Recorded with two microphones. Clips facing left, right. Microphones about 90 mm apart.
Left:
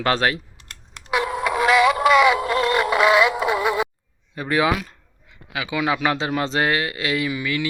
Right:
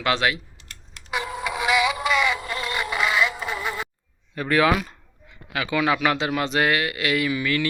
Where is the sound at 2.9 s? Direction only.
Centre (ahead or behind).